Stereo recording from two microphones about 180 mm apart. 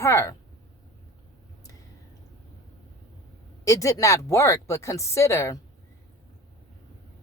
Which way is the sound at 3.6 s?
20° left (ahead or behind).